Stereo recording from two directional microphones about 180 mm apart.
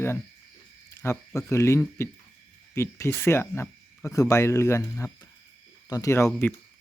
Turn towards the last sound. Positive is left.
turn(degrees=15)  # may be behind; listen again after turning